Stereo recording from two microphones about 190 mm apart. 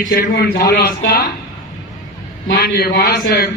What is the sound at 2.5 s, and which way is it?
A man's voice, 55° left (ahead or behind).